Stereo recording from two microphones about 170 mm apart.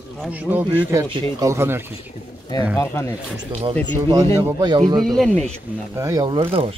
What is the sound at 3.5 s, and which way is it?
Speech, 40° right (ahead or behind).